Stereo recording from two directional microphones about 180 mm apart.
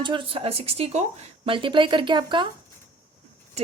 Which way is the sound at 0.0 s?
30° right (ahead or behind).